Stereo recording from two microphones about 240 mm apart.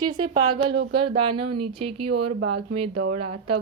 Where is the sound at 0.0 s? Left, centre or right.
Centre.